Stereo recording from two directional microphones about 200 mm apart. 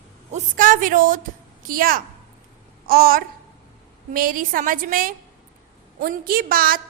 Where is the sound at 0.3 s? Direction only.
40° right (ahead or behind).